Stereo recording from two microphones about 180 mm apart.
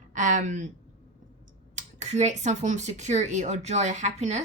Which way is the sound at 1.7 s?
40° right (ahead or behind).